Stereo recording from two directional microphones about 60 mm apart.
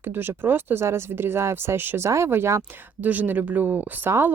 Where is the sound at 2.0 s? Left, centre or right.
Right.